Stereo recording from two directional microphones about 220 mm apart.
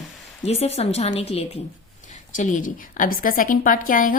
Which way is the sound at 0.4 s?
30° left (ahead or behind).